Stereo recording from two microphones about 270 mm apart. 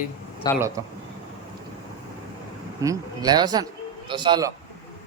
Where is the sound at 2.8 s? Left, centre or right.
Centre.